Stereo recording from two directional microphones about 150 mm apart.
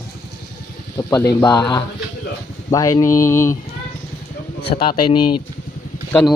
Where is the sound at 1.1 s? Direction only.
25° left (ahead or behind).